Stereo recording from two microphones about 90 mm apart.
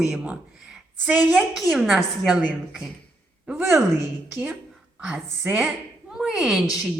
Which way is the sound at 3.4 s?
5° right (ahead or behind).